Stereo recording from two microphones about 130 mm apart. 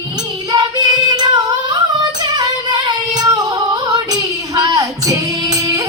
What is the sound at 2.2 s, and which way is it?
Female singing, 30° right (ahead or behind).